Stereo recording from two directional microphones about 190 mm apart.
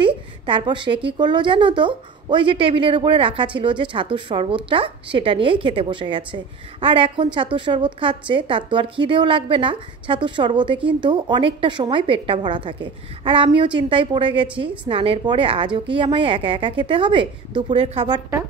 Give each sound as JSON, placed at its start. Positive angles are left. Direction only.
{"t": 0.0, "sound": "a woman's voice", "side_deg": -25}